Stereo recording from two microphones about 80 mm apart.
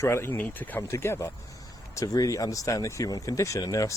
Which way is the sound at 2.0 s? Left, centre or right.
Left.